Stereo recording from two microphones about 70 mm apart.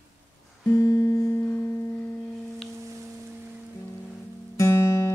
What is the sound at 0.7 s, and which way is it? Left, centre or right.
Music, left.